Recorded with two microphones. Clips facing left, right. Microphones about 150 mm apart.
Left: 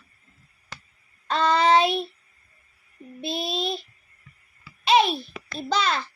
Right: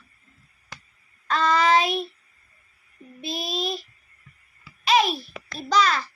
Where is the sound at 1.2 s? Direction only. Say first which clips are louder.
Left 1 dB; 30° left (ahead or behind).